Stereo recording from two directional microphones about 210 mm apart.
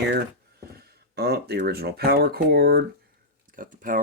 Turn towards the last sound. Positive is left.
turn(degrees=-40)  # may be behind; listen again after turning